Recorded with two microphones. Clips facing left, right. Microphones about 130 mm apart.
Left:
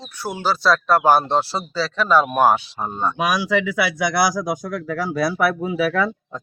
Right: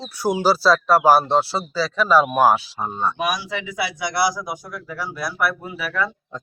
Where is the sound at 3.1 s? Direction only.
90° left.